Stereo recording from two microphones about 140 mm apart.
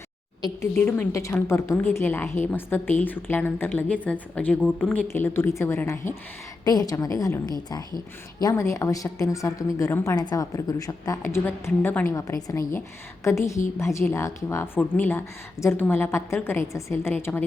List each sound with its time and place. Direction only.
0.4 s a woman's voice: 20° left (ahead or behind)
6.7 s a woman's voice: 25° left (ahead or behind)